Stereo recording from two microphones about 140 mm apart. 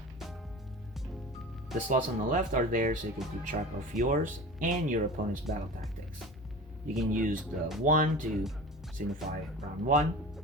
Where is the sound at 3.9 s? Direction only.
70° right (ahead or behind).